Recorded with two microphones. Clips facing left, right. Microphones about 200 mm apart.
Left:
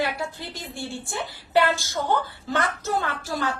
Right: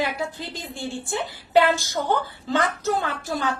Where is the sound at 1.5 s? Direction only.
15° right (ahead or behind).